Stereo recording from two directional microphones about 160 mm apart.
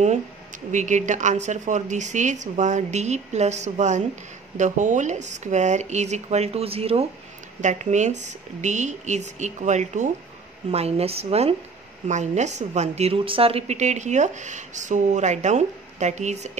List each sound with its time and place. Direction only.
0.7 s a woman's voice: 50° right (ahead or behind)
7.6 s a woman's voice: 50° right (ahead or behind)